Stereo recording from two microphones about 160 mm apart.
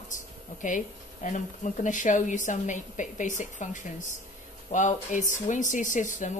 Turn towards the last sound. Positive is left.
turn(degrees=50)  # may be behind; listen again after turning